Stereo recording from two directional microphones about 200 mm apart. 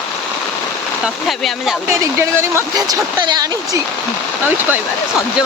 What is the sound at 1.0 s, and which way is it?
Speech, centre (ahead or behind).